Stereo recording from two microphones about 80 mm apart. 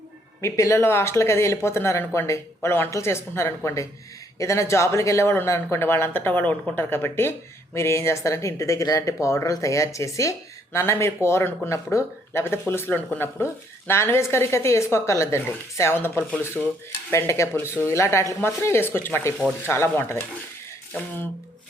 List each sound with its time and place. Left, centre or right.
0.4 s speech: left
16.6 s stir: centre
17.1 s speech: left